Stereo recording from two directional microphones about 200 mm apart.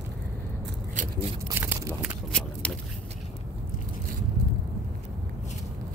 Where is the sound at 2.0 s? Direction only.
5° left (ahead or behind).